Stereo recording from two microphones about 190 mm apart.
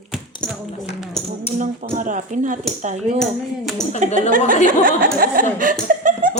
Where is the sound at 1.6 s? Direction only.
40° right (ahead or behind).